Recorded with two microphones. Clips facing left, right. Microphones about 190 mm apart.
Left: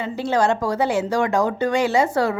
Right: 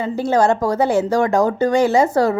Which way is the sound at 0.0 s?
40° right (ahead or behind).